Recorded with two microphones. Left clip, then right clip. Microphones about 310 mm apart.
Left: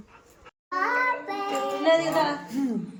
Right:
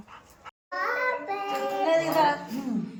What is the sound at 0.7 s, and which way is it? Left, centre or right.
Child singing, left.